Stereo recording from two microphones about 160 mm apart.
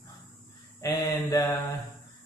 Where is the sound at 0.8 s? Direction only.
25° left (ahead or behind).